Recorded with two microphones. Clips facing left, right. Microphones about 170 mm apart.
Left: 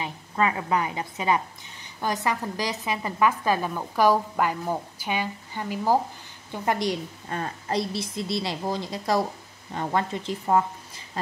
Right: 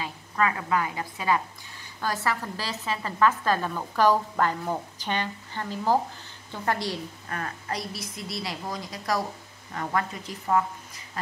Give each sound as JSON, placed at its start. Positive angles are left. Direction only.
{"t": 0.0, "sound": "a woman's voice", "side_deg": 20}